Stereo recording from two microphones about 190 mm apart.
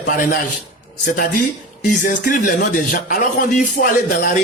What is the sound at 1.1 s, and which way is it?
A man's voice, 50° left (ahead or behind).